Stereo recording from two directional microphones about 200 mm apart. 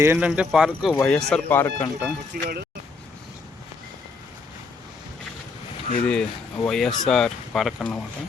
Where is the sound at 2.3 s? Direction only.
45° right (ahead or behind).